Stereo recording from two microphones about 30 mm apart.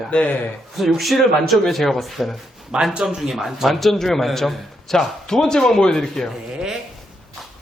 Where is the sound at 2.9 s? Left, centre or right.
Right.